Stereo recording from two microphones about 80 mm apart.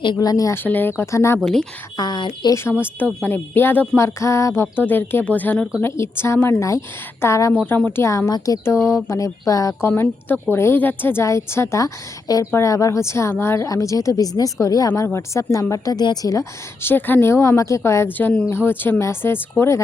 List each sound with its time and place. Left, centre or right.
0.2 s speech: left
0.5 s a woman's voice: left
2.0 s speech: left
2.5 s a woman's voice: left
5.8 s a woman's voice: left
7.9 s speech: left
8.3 s speech: left
8.6 s a woman's voice: left
9.8 s a woman's voice: left
13.7 s speech: left
15.0 s a woman's voice: left
16.8 s a woman's voice: left
18.2 s a woman's voice: left